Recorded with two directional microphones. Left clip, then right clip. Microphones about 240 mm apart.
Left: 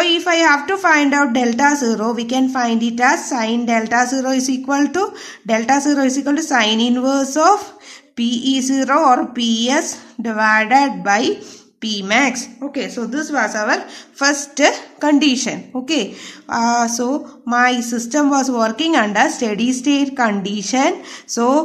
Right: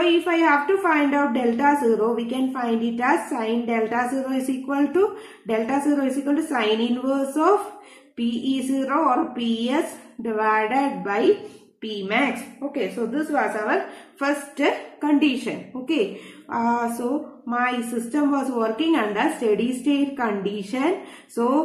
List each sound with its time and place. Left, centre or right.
0.0 s a woman's voice: left
16.4 s a sound: left
17.5 s a woman's voice: left